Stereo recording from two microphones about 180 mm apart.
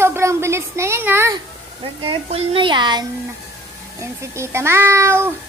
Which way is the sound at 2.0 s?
30° right (ahead or behind).